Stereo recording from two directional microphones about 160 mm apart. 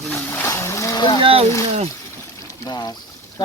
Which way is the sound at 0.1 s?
10° left (ahead or behind).